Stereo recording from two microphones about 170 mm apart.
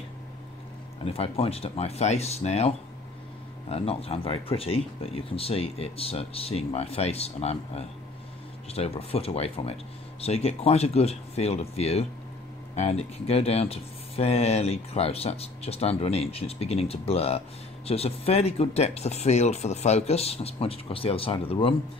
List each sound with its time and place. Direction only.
1.0 s speech: 35° left (ahead or behind)